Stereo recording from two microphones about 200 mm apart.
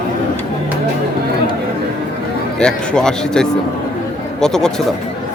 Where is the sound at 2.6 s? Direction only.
5° left (ahead or behind).